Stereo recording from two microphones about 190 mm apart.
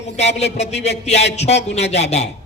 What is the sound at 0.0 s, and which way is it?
A man's voice, 35° left (ahead or behind).